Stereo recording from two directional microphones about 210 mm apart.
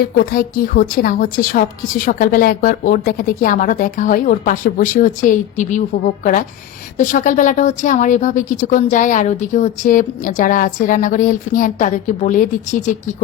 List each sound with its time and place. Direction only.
0.0 s a woman's voice: 45° left (ahead or behind)
7.0 s a woman's voice: 40° left (ahead or behind)